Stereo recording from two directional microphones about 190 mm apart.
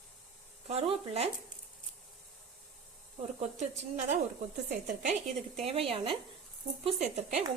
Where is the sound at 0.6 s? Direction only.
30° right (ahead or behind).